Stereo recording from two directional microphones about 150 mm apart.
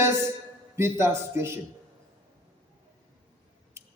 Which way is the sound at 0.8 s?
15° right (ahead or behind).